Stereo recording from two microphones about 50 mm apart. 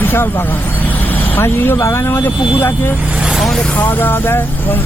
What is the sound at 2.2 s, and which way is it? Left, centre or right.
Speech, left.